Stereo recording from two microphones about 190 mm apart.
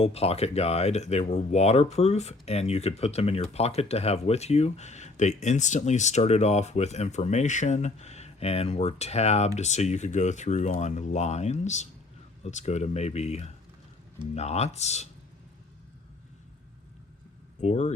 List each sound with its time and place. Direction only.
0.0 s speech: 30° left (ahead or behind)
17.6 s speech: 35° left (ahead or behind)